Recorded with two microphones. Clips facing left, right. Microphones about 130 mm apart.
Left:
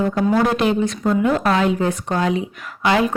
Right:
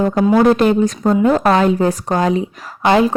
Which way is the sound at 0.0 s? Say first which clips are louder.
Right 5 dB; 40° right (ahead or behind).